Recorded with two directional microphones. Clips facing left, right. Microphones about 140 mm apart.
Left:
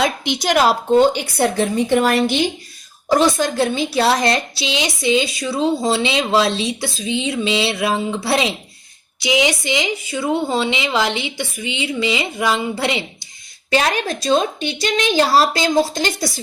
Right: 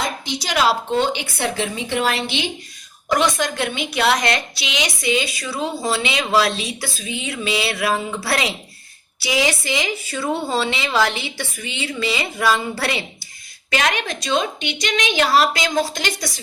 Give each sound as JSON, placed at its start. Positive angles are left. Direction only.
{"t": 0.0, "sound": "a woman's voice", "side_deg": 60}
{"t": 3.1, "sound": "a woman's voice", "side_deg": 30}
{"t": 13.7, "sound": "a woman's voice", "side_deg": 35}